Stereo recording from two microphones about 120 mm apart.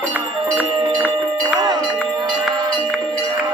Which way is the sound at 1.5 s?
35° right (ahead or behind).